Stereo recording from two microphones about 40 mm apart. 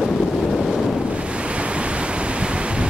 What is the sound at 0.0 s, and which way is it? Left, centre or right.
Boat, centre.